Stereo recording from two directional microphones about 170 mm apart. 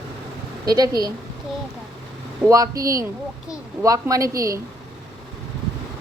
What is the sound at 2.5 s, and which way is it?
A woman's voice, 20° right (ahead or behind).